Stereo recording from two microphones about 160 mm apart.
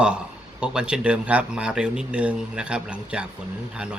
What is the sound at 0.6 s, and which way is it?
Speech, 5° right (ahead or behind).